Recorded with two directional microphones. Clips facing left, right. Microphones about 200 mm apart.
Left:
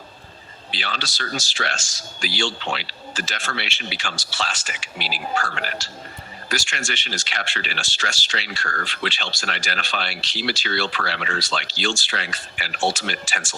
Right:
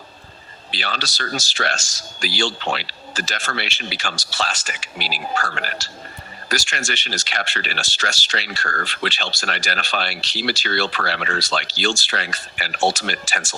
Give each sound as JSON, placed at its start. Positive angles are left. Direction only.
{"t": 0.7, "sound": "speech", "side_deg": -40}